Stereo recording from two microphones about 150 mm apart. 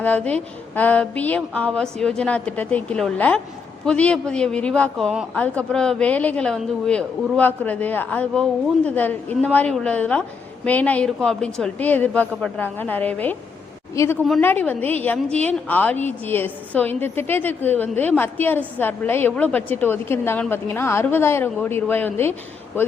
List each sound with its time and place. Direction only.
0.0 s a woman's voice: 10° left (ahead or behind)